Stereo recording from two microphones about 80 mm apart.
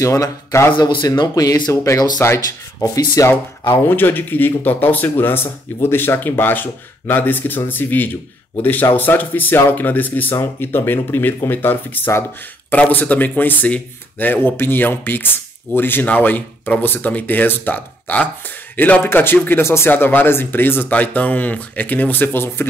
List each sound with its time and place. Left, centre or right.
0.0 s speech: left
0.7 s speech: left
3.3 s speech: left